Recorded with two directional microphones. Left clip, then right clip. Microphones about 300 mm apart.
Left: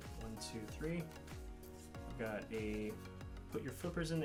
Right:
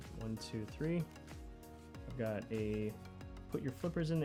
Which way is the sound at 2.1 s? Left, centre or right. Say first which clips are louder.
Right 3 dB; right.